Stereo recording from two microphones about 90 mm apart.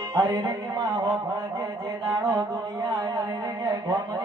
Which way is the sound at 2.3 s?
45° right (ahead or behind).